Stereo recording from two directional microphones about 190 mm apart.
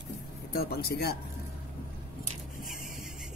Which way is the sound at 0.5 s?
55° left (ahead or behind).